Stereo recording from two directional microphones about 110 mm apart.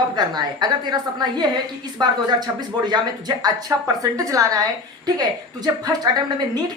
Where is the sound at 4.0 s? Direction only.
30° right (ahead or behind).